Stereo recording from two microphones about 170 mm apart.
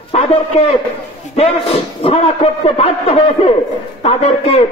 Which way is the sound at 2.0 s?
35° left (ahead or behind).